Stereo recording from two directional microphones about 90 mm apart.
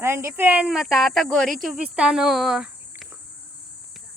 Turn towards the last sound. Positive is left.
turn(degrees=-5)  # may be behind; listen again after turning